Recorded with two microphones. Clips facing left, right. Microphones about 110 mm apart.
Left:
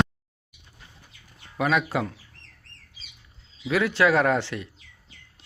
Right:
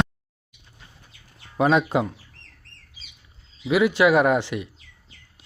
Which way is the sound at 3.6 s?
15° right (ahead or behind).